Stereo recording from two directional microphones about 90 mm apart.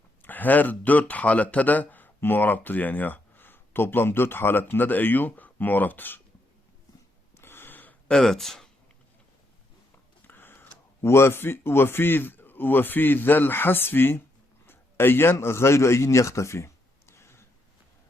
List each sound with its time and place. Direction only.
0.2 s speech: 20° left (ahead or behind)
7.3 s a sound: 25° left (ahead or behind); by 8.7 s 5° left (ahead or behind)
10.2 s a man's voice: 25° left (ahead or behind)